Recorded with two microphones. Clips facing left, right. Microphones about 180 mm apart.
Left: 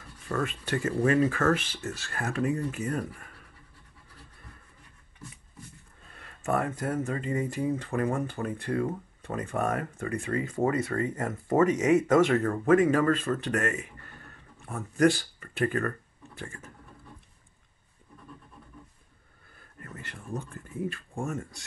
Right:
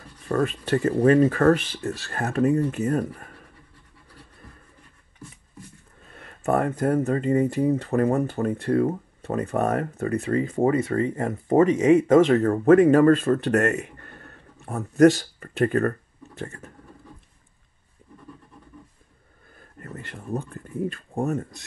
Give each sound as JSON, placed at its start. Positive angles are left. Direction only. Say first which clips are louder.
{"t": 0.3, "sound": "speech", "louder": "right 7 dB", "side_deg": -35}
{"t": 6.1, "sound": "a sound", "louder": "right 6 dB", "side_deg": -40}
{"t": 6.8, "sound": "speech", "louder": "right 8 dB", "side_deg": -40}
{"t": 12.4, "sound": "speech", "louder": "right 7 dB", "side_deg": -35}
{"t": 14.7, "sound": "speech", "louder": "right 7 dB", "side_deg": -40}
{"t": 19.8, "sound": "speech", "louder": "right 6 dB", "side_deg": -35}